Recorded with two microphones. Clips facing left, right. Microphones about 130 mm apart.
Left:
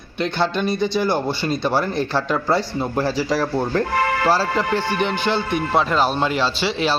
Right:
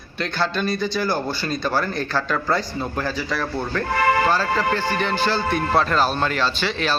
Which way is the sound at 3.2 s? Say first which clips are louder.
Left 5 dB; 35° left (ahead or behind).